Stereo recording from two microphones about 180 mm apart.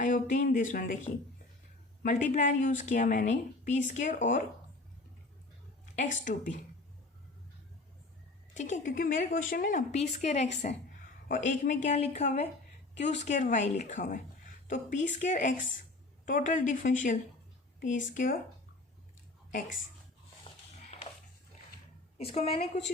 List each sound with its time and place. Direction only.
0.0 s a woman's voice: 45° left (ahead or behind)
5.8 s a woman's voice: 45° left (ahead or behind)
8.5 s a woman's voice: 45° left (ahead or behind)
18.0 s a woman's voice: 45° left (ahead or behind)
19.5 s a woman's voice: 45° left (ahead or behind)
22.2 s a woman's voice: 35° left (ahead or behind)